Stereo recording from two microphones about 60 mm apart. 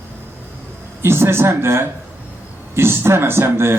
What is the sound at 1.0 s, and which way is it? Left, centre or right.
A man's voice, right.